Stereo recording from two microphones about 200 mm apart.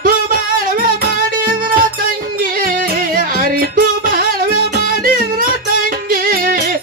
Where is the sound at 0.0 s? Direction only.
45° right (ahead or behind).